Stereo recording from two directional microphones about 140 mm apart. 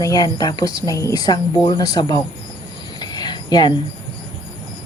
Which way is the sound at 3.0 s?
30° left (ahead or behind).